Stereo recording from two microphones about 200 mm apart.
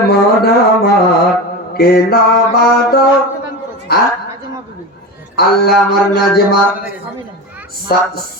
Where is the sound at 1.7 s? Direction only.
50° left (ahead or behind).